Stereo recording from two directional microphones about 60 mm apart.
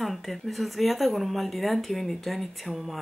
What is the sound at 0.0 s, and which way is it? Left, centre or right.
Speech, centre.